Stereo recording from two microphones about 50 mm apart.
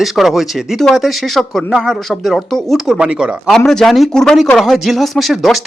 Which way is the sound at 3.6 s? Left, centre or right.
Centre.